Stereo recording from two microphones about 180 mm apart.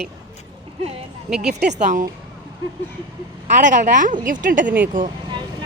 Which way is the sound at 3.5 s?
45° right (ahead or behind).